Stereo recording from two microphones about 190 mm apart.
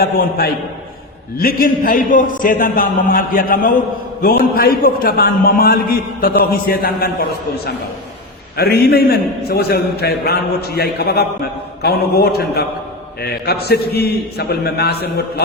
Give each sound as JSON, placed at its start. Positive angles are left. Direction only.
{"t": 0.0, "sound": "a man's voice", "side_deg": 55}